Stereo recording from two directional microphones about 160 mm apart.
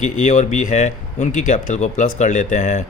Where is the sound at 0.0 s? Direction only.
50° left (ahead or behind).